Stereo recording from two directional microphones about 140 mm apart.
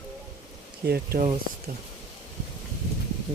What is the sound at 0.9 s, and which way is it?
Speech, 90° right.